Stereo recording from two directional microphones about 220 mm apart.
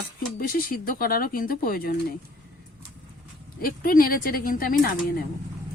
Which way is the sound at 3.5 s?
40° left (ahead or behind).